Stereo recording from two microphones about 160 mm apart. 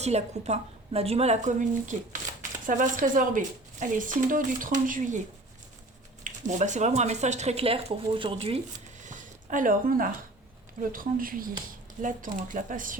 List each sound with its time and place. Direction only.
0.0 s speech: 45° right (ahead or behind)
6.2 s speech: 50° right (ahead or behind)
9.0 s a sound: 50° right (ahead or behind)
10.9 s speech: 60° right (ahead or behind)